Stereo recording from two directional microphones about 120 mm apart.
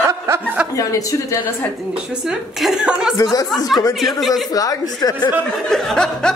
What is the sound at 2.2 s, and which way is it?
Speech, 5° right (ahead or behind).